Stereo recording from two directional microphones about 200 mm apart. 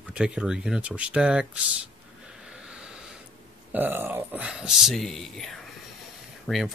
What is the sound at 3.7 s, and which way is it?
Speech, 10° right (ahead or behind).